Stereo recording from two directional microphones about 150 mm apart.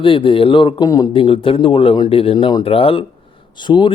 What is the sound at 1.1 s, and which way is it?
Speech, 35° left (ahead or behind).